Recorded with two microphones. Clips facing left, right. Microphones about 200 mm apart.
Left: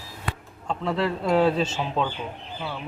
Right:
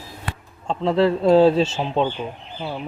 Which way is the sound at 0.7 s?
30° right (ahead or behind).